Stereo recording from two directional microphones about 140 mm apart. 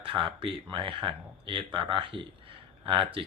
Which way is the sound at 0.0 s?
40° right (ahead or behind).